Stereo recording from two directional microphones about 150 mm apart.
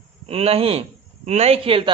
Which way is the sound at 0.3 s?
40° right (ahead or behind).